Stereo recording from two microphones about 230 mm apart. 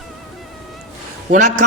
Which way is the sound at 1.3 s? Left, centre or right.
Right.